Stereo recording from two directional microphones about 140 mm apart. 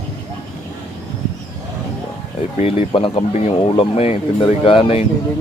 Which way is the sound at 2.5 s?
50° left (ahead or behind).